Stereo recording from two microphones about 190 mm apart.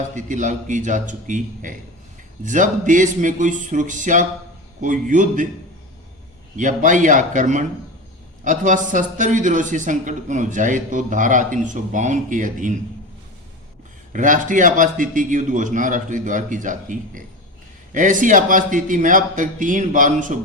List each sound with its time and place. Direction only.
0.2 s a man's voice: 40° right (ahead or behind)
6.6 s a man's voice: 40° right (ahead or behind)
14.1 s a man's voice: 45° right (ahead or behind)